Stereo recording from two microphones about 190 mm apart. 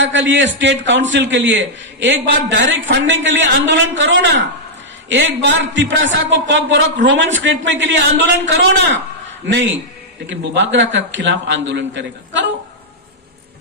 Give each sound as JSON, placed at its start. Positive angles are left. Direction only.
{"t": 0.0, "sound": "a man's voice", "side_deg": -75}
{"t": 9.5, "sound": "a man's voice", "side_deg": -65}